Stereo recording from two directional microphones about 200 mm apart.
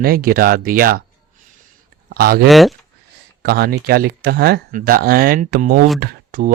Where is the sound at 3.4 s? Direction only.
50° right (ahead or behind).